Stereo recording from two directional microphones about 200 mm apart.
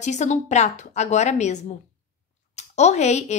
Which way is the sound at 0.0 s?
35° left (ahead or behind).